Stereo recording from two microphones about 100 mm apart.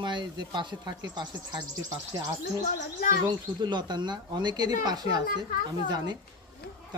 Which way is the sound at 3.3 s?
45° right (ahead or behind).